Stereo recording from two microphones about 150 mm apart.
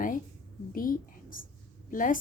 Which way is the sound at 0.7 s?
70° left (ahead or behind).